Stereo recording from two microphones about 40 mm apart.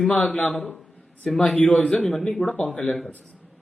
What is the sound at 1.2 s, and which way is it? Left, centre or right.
Speech, centre.